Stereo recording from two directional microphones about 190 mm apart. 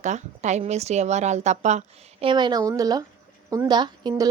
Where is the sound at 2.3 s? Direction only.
25° right (ahead or behind).